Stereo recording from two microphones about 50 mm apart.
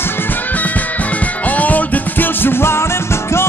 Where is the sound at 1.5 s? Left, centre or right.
Left.